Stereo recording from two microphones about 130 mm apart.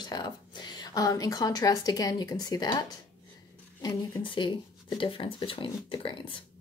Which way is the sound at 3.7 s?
35° left (ahead or behind).